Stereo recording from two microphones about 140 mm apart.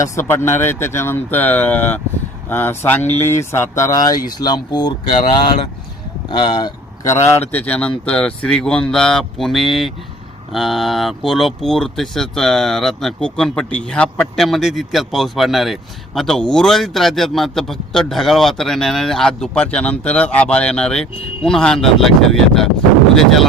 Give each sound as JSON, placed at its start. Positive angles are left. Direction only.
{"t": 0.0, "sound": "speech", "side_deg": 20}
{"t": 3.0, "sound": "speech", "side_deg": 50}
{"t": 3.2, "sound": "speech", "side_deg": 20}
{"t": 6.5, "sound": "speech", "side_deg": 30}